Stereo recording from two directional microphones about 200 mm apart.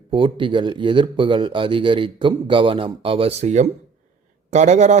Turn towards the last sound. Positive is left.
turn(degrees=-35)  # may be behind; listen again after turning